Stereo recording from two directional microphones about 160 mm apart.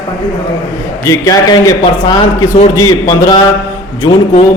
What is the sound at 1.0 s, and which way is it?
A man's voice, 20° left (ahead or behind).